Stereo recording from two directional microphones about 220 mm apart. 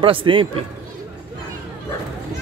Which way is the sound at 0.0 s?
25° right (ahead or behind).